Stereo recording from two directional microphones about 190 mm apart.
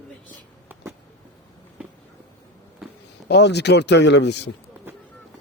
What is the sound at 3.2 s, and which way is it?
Speech, 60° left (ahead or behind).